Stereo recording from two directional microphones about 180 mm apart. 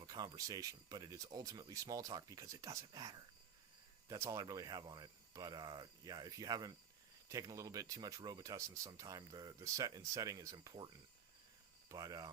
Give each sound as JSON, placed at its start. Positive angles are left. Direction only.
{"t": 0.0, "sound": "speech", "side_deg": -20}